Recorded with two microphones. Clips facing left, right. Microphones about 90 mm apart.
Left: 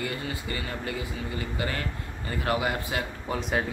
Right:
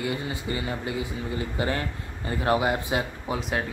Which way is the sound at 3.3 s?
Centre (ahead or behind).